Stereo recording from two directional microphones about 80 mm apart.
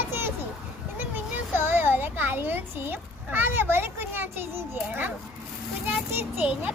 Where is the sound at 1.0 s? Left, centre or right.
Right.